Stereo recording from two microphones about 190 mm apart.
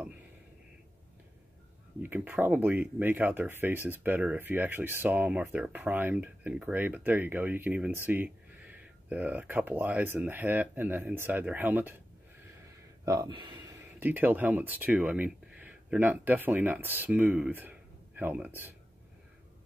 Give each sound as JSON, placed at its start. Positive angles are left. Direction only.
{"t": 2.0, "sound": "speech", "side_deg": -10}
{"t": 13.0, "sound": "speech", "side_deg": -20}